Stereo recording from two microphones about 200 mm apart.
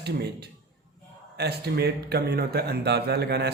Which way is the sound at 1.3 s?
55° right (ahead or behind).